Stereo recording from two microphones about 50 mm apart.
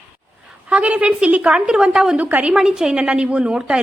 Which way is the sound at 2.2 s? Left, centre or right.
Right.